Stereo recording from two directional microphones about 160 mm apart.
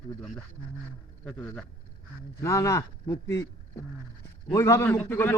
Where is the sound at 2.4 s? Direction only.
20° left (ahead or behind).